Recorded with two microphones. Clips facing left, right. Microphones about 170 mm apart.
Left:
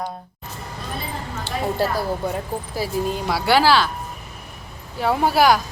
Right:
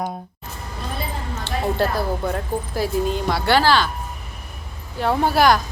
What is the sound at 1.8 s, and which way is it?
Speech, 10° left (ahead or behind).